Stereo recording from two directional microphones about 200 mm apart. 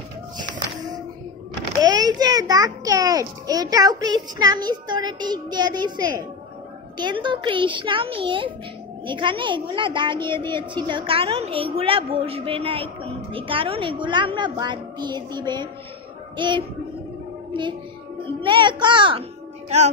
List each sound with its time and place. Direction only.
1.8 s a child's voice: 20° right (ahead or behind)
18.4 s a child's voice: 25° right (ahead or behind)
19.7 s music: 30° right (ahead or behind)